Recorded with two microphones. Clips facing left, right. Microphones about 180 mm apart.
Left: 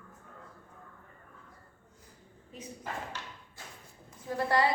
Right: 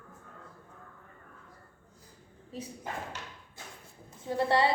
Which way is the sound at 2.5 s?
30° right (ahead or behind).